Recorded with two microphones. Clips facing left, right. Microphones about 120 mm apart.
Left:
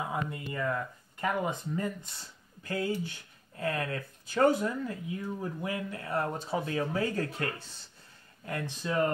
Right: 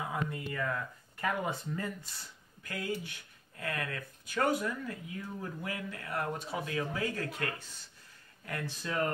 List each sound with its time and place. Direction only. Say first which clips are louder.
0.0 s speech: left 2 dB; 25° left (ahead or behind)
8.5 s speech: left 4 dB; 20° left (ahead or behind)